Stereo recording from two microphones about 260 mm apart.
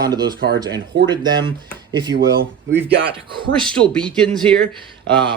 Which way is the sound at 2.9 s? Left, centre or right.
Centre.